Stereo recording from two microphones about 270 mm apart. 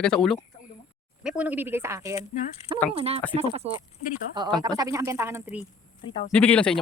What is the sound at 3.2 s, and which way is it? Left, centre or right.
Speech, centre.